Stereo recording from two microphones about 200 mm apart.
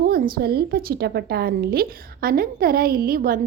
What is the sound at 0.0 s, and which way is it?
A woman's voice, 45° right (ahead or behind).